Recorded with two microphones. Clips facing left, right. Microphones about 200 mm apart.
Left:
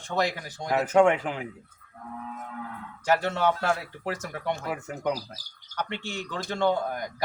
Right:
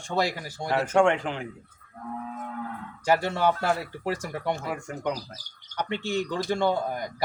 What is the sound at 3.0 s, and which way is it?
Speech, 10° right (ahead or behind).